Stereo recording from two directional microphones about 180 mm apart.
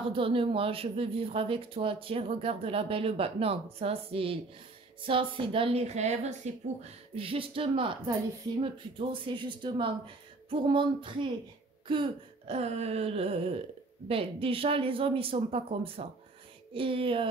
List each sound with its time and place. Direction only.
0.1 s a woman's voice: 30° right (ahead or behind)